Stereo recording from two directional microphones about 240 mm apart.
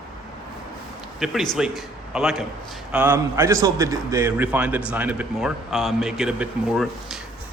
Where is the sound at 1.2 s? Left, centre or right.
Centre.